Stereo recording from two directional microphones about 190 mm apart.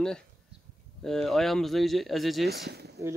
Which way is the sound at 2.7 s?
60° right (ahead or behind).